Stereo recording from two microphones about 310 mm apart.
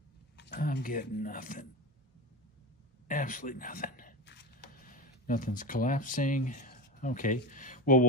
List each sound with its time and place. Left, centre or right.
0.4 s speech: left
3.1 s speech: left